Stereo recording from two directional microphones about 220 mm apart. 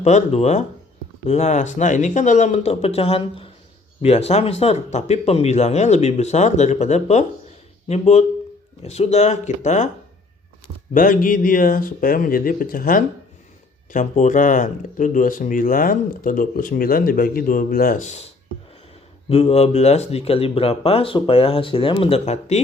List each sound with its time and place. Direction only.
0.0 s speech: 30° left (ahead or behind)
10.9 s speech: 40° left (ahead or behind)
19.3 s speech: 30° left (ahead or behind)